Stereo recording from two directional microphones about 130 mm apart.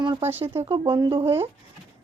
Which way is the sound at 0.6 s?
45° right (ahead or behind).